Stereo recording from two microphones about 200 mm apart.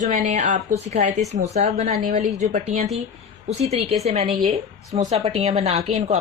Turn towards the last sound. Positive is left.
turn(degrees=-35)  # may be behind; listen again after turning